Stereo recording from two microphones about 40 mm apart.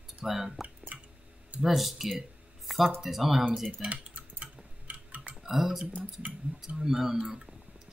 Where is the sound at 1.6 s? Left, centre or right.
Centre.